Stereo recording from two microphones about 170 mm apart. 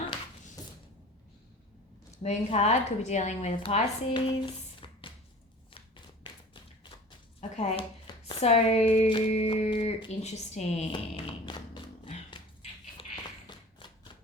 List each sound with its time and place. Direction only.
2.2 s speech: 40° left (ahead or behind)
4.1 s a sound: 30° left (ahead or behind)
6.2 s tap: 30° left (ahead or behind)
7.5 s speech: 40° left (ahead or behind)
11.4 s music: 25° left (ahead or behind)
13.5 s a sound: 30° left (ahead or behind)